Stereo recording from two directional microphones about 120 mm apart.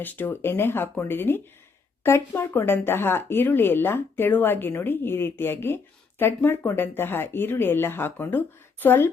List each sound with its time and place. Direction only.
0.0 s speech: 15° left (ahead or behind)